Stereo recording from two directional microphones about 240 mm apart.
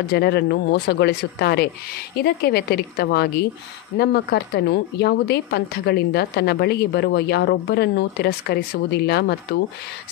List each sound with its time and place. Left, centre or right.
0.0 s speech: left